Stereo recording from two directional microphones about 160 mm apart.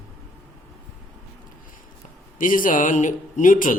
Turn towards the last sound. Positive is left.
turn(degrees=55)  # may be behind; listen again after turning